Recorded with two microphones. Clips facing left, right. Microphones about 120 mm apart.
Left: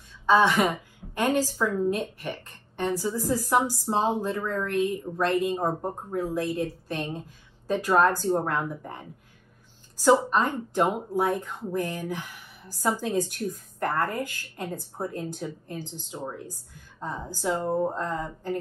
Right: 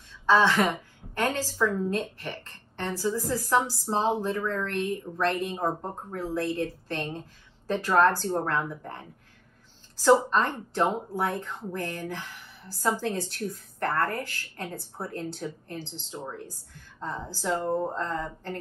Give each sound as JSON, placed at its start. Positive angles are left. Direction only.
{"t": 0.3, "sound": "a woman's voice", "side_deg": 15}
{"t": 10.3, "sound": "a woman's voice", "side_deg": 15}